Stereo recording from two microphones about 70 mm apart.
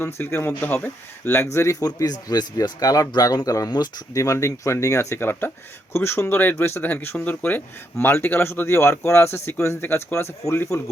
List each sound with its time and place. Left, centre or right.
0.0 s speech: left
1.8 s speech: left